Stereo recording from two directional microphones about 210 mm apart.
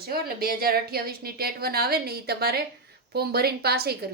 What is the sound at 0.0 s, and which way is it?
Speech, 45° right (ahead or behind).